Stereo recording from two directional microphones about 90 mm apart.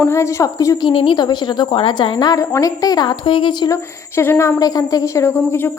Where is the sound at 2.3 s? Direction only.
40° left (ahead or behind); by 3.6 s 60° left (ahead or behind).